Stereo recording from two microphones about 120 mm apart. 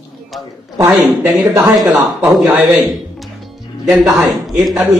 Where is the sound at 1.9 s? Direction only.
25° right (ahead or behind).